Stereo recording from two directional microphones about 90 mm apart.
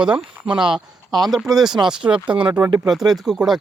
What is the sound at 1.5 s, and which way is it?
Speech, 40° right (ahead or behind).